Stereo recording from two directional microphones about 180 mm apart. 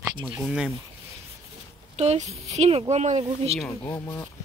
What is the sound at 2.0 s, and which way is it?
A woman's voice, 40° right (ahead or behind).